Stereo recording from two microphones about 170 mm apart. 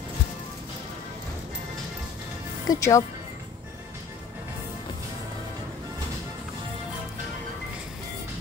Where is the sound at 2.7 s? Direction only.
20° left (ahead or behind).